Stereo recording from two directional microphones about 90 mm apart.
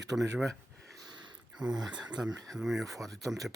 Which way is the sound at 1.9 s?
10° right (ahead or behind).